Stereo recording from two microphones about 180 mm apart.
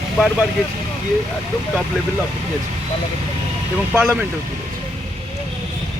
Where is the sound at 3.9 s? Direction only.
10° right (ahead or behind).